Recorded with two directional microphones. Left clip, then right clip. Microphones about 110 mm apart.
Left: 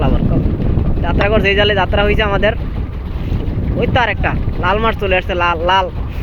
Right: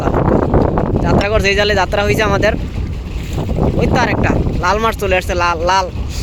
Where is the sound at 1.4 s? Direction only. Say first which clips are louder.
Left 2 dB; 5° right (ahead or behind).